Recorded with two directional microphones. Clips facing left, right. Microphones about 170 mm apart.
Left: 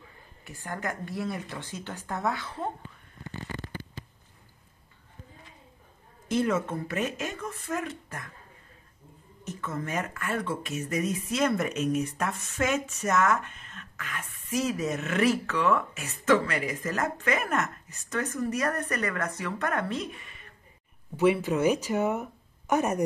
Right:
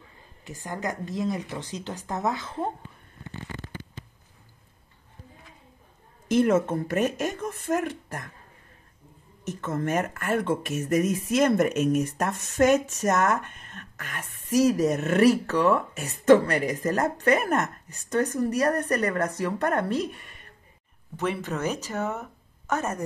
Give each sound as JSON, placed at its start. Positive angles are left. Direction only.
{"t": 0.7, "sound": "speech", "side_deg": -20}
{"t": 6.4, "sound": "speech", "side_deg": -45}
{"t": 9.4, "sound": "a sound", "side_deg": -70}
{"t": 9.7, "sound": "speech", "side_deg": -50}
{"t": 21.2, "sound": "speech", "side_deg": 10}